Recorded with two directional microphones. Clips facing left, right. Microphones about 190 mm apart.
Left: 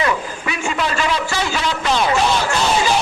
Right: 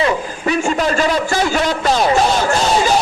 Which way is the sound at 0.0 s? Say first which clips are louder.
Right 3 dB; 35° right (ahead or behind).